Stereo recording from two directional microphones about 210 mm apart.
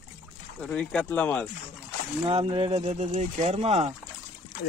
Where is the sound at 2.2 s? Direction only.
25° right (ahead or behind).